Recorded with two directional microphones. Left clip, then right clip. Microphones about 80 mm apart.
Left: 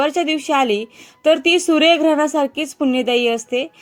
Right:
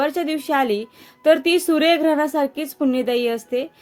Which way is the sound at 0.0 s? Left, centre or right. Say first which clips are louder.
Left 4 dB; left.